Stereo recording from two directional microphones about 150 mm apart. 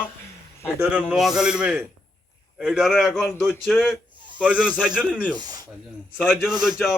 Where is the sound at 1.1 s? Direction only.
5° right (ahead or behind).